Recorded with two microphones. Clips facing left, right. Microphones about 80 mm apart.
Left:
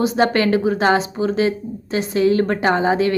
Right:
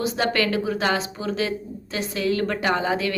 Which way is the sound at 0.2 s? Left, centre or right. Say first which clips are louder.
Left 6 dB; left.